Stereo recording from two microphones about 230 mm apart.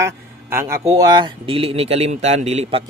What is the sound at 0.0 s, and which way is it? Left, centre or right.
Speech, centre.